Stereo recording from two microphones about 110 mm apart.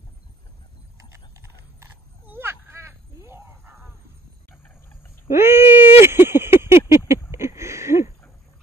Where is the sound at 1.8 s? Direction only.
20° right (ahead or behind).